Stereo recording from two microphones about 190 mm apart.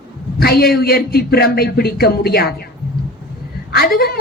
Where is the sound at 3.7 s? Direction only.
50° left (ahead or behind).